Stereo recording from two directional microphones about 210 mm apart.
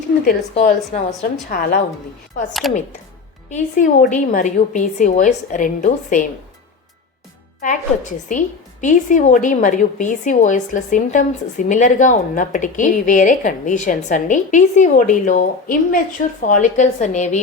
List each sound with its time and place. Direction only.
0.9 s a woman's voice: 35° left (ahead or behind)
1.5 s a woman's voice: 45° left (ahead or behind)
2.5 s speech: centre (ahead or behind)
3.5 s a woman's voice: 35° left (ahead or behind)
7.6 s a woman's voice: 35° left (ahead or behind)